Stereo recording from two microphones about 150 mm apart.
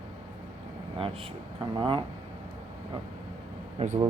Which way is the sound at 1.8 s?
30° right (ahead or behind).